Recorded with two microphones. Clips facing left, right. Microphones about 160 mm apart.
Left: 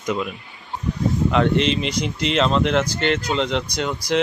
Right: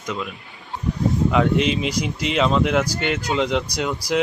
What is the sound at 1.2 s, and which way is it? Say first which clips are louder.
Speech: left 1 dB; centre (ahead or behind).